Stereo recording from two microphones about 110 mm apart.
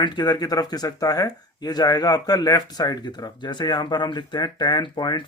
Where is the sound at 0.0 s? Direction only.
40° left (ahead or behind).